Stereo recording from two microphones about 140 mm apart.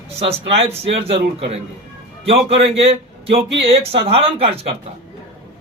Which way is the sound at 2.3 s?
45° right (ahead or behind).